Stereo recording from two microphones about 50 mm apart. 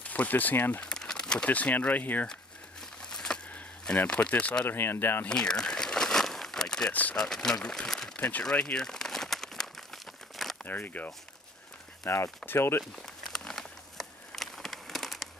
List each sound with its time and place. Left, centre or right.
0.1 s speech: left
0.8 s crumpling: centre
1.4 s speech: left
3.1 s a sound: centre
3.9 s speech: centre
4.3 s speech: left
4.6 s speech: left
5.3 s crumpling: centre
6.9 s speech: left
7.2 s speech: centre
8.5 s crumpling: centre
10.6 s speech: left
12.0 s speech: left
13.0 s a sound: centre